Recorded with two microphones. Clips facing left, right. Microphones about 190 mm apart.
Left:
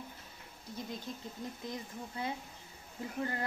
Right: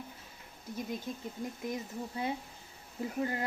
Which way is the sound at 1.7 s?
20° right (ahead or behind).